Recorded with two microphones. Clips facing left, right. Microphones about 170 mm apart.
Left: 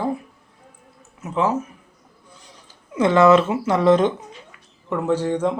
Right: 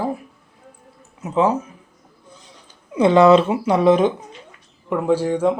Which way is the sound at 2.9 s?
15° right (ahead or behind).